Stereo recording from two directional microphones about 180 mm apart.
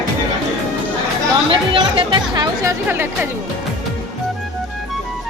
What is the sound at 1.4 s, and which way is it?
Speech, 30° right (ahead or behind).